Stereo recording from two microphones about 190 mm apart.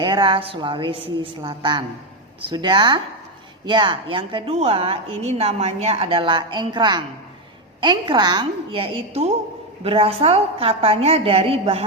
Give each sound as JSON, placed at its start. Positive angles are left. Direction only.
{"t": 0.0, "sound": "a woman's voice", "side_deg": -25}